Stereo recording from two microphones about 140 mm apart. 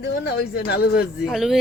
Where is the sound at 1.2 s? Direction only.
Centre (ahead or behind).